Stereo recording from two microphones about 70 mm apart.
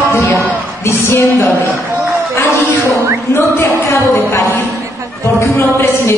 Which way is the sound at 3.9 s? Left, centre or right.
Left.